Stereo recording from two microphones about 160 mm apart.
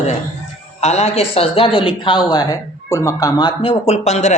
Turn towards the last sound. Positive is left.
turn(degrees=45)  # may be behind; listen again after turning